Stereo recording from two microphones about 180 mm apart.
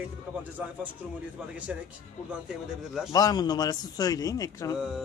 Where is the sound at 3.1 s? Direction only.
20° left (ahead or behind).